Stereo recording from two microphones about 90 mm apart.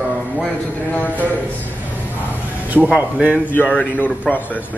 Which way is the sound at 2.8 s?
10° right (ahead or behind).